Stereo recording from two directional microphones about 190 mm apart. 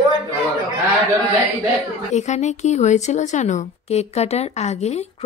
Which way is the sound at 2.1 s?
35° left (ahead or behind).